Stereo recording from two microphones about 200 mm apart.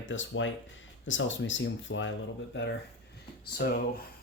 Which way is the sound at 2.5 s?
60° left (ahead or behind).